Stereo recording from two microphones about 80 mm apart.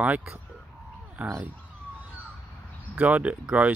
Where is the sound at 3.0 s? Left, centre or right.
Centre.